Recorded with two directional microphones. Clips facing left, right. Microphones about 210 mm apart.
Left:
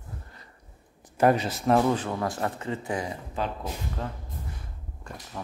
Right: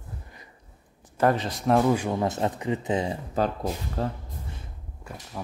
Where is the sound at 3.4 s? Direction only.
40° right (ahead or behind).